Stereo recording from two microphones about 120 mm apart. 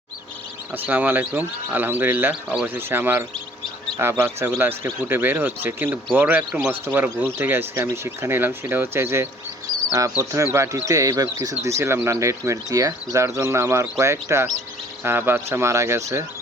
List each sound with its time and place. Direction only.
0.7 s speech: 15° right (ahead or behind)